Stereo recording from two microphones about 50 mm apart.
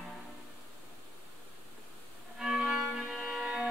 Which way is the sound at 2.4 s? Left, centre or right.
Centre.